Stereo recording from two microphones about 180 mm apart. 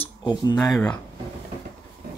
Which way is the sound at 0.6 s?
5° left (ahead or behind).